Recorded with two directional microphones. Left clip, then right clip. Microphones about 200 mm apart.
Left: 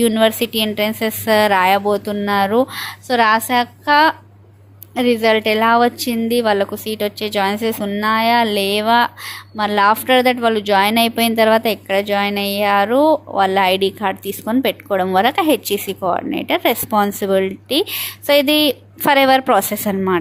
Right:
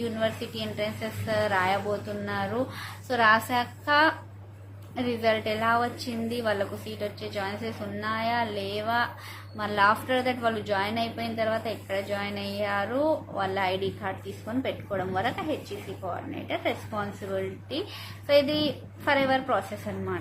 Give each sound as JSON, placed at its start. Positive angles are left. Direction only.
{"t": 0.0, "sound": "speech", "side_deg": 45}